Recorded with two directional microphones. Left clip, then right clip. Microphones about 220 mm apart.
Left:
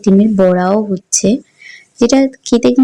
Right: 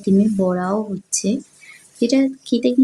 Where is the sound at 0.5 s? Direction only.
30° left (ahead or behind).